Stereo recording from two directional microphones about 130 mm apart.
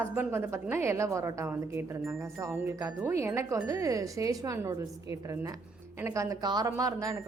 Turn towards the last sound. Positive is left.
turn(degrees=-25)  # may be behind; listen again after turning